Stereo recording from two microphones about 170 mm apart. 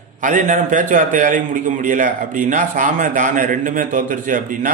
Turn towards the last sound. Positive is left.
turn(degrees=-50)  # may be behind; listen again after turning